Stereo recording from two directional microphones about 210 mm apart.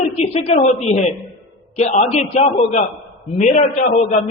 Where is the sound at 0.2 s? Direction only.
30° left (ahead or behind).